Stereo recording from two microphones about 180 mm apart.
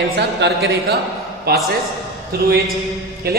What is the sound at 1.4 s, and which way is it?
Speech, 60° right (ahead or behind).